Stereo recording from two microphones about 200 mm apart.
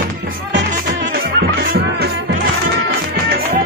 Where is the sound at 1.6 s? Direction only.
50° right (ahead or behind).